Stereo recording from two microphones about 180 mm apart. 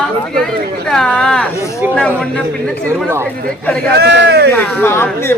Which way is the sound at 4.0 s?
75° right (ahead or behind).